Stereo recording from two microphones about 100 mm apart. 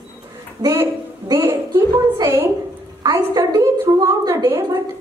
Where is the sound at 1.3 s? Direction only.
30° right (ahead or behind).